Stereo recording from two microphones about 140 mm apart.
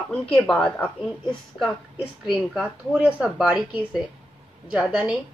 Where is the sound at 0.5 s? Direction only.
5° left (ahead or behind).